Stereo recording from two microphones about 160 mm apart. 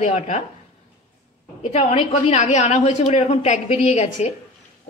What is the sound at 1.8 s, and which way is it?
A woman's voice, 40° left (ahead or behind).